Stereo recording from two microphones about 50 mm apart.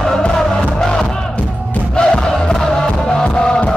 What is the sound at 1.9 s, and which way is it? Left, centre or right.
Crowd, centre.